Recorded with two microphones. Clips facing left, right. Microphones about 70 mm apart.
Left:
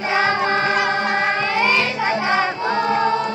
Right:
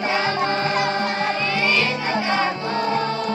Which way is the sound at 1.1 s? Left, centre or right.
Left.